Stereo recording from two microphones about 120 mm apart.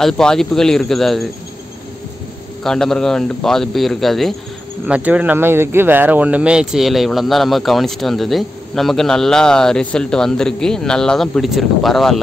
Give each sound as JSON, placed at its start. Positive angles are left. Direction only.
{"t": 0.0, "sound": "speech", "side_deg": 5}
{"t": 2.6, "sound": "speech", "side_deg": 5}
{"t": 4.8, "sound": "speech", "side_deg": -10}